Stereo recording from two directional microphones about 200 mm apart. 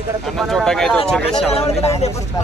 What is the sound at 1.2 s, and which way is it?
Speech, 30° left (ahead or behind).